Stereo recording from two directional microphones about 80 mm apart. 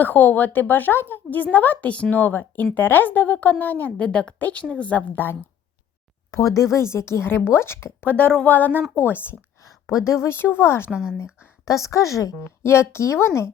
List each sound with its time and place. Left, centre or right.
0.0 s speech: left
6.3 s speech: left
8.0 s speech: centre
10.8 s a woman's voice: centre
11.6 s a woman's voice: left
12.5 s speech: left